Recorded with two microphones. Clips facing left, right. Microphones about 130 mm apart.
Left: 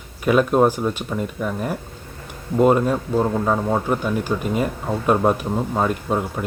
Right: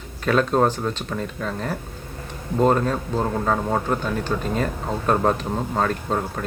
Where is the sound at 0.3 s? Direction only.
10° left (ahead or behind).